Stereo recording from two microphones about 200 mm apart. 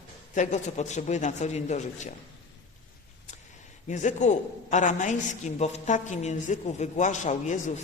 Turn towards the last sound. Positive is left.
turn(degrees=40)  # may be behind; listen again after turning